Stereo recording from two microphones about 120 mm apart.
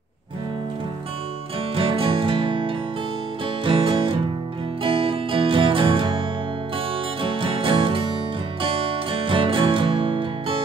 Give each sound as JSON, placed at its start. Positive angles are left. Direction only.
{"t": 1.8, "sound": "music", "side_deg": -50}
{"t": 7.2, "sound": "music", "side_deg": -45}